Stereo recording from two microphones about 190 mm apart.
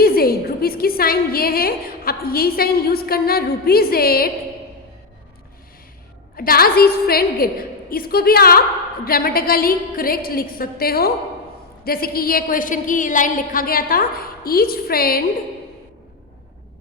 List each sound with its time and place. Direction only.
0.0 s a woman's voice: 50° left (ahead or behind)
6.3 s a woman's voice: 50° left (ahead or behind)